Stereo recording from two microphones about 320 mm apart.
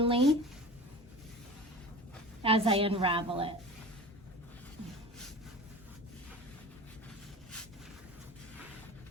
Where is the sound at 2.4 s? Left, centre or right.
Centre.